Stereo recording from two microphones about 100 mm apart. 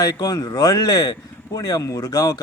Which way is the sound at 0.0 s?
40° left (ahead or behind).